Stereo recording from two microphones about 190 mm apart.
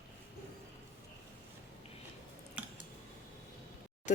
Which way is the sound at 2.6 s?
5° right (ahead or behind).